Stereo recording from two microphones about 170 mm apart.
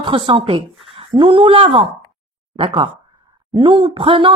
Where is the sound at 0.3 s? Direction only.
30° right (ahead or behind).